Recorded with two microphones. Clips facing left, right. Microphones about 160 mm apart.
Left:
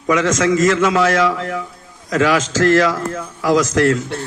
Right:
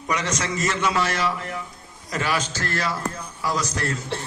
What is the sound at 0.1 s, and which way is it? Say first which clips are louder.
A man's voice: left 11 dB; 90° left.